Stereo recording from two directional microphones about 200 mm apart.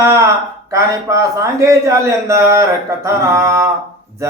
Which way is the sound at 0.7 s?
15° right (ahead or behind).